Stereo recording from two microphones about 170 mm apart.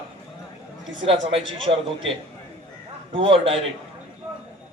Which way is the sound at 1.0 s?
35° right (ahead or behind).